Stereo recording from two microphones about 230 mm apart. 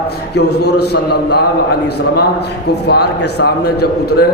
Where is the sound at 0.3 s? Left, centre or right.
Left.